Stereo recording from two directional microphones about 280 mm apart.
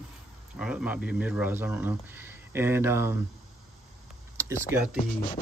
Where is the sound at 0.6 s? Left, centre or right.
Centre.